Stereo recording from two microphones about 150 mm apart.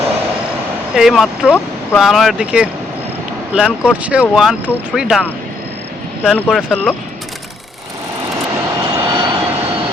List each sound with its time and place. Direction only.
0.9 s speech: centre (ahead or behind)
4.6 s speech: 10° left (ahead or behind)
4.9 s speech: 5° right (ahead or behind)
6.2 s speech: 10° left (ahead or behind)
6.5 s speech: centre (ahead or behind)
8.6 s vehicle: 25° right (ahead or behind)